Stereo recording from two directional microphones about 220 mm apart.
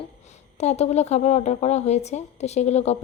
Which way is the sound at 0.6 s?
30° left (ahead or behind).